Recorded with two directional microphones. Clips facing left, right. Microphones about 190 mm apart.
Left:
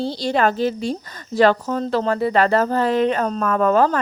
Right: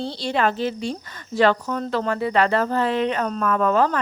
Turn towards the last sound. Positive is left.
turn(degrees=40)  # may be behind; listen again after turning